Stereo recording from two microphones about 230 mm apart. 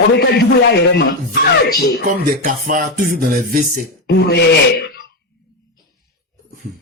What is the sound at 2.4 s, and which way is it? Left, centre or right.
Speech, right.